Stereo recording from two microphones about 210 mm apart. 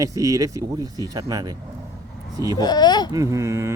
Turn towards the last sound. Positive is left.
turn(degrees=-15)  # may be behind; listen again after turning